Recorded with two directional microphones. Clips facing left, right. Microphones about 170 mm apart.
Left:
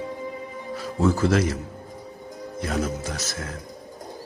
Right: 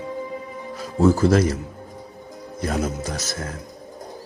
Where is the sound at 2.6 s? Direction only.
40° right (ahead or behind).